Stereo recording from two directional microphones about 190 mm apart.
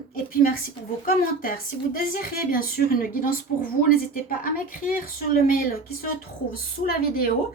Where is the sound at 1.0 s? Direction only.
45° left (ahead or behind).